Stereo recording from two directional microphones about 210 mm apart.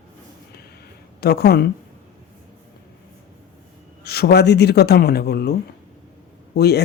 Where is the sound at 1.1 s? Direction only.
50° left (ahead or behind).